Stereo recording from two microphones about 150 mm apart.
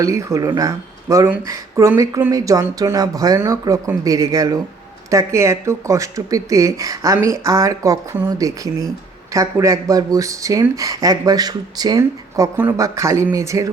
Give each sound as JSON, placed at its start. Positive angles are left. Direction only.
{"t": 0.0, "sound": "speech", "side_deg": -20}